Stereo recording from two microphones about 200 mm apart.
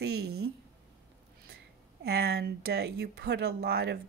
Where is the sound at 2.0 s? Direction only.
55° right (ahead or behind).